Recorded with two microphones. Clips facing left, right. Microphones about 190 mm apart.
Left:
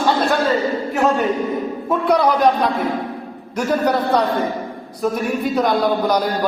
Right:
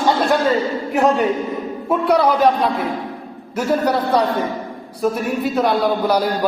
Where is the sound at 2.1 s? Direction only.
5° right (ahead or behind).